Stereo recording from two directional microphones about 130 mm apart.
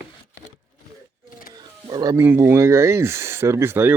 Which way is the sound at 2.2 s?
20° right (ahead or behind).